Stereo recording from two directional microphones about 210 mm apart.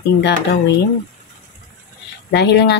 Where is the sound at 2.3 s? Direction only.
55° left (ahead or behind).